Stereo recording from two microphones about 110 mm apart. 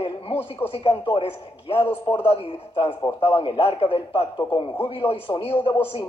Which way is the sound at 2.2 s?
60° left (ahead or behind).